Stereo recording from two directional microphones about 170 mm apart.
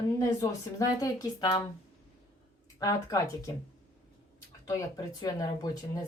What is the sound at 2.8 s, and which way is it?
Speech, 20° left (ahead or behind).